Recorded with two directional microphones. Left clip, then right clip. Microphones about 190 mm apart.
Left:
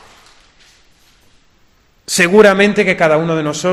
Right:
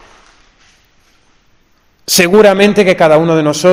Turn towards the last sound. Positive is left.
turn(degrees=-35)  # may be behind; listen again after turning